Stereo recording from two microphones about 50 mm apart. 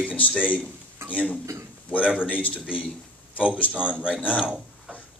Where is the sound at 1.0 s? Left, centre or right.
Right.